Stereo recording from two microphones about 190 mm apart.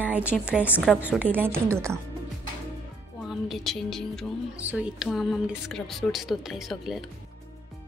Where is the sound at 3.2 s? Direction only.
Centre (ahead or behind).